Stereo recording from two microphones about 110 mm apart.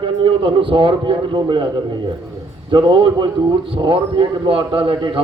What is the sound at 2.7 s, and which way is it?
A man's voice, 45° right (ahead or behind).